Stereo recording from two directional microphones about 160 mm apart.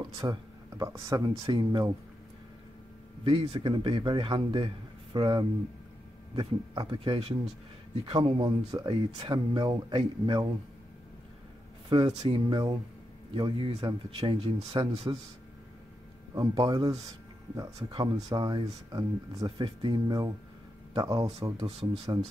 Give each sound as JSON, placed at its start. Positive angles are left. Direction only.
{"t": 0.0, "sound": "speech", "side_deg": -25}
{"t": 3.3, "sound": "speech", "side_deg": -35}
{"t": 11.9, "sound": "speech", "side_deg": -30}
{"t": 16.3, "sound": "speech", "side_deg": -25}